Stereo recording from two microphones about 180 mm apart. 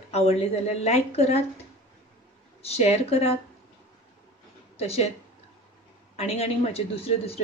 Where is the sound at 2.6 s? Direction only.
35° left (ahead or behind).